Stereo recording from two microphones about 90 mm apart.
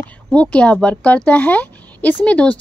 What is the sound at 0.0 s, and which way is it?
A woman's voice, 15° left (ahead or behind).